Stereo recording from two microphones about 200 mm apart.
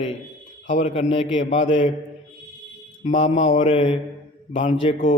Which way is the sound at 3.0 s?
35° left (ahead or behind).